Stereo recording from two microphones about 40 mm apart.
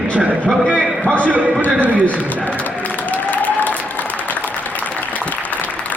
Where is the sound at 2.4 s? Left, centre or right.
Left.